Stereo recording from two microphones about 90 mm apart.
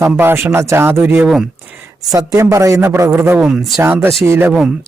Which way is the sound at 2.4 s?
35° right (ahead or behind).